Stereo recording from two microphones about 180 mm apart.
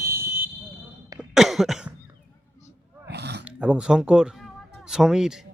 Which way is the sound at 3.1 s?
70° right (ahead or behind).